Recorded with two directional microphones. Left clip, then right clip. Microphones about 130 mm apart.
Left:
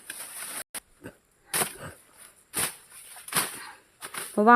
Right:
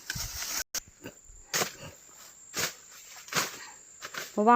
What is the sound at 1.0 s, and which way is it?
Wild animals, 5° left (ahead or behind).